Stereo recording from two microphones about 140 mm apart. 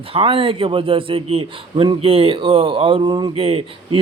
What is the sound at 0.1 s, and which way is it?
A man's voice, 40° right (ahead or behind).